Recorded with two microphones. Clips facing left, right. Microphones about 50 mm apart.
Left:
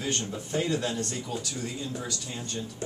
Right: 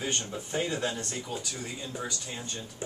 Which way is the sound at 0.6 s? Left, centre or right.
Right.